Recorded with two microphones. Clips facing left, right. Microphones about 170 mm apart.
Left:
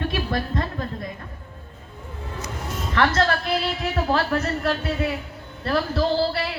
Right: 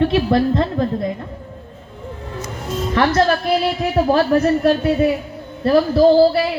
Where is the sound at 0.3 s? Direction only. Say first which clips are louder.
Right 10 dB; 30° right (ahead or behind).